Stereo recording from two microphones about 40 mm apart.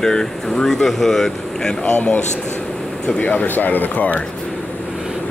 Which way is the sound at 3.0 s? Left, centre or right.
Left.